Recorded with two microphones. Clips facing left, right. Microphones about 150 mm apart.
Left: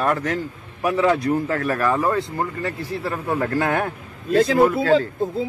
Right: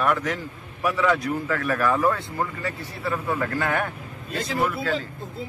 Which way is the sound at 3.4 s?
35° left (ahead or behind).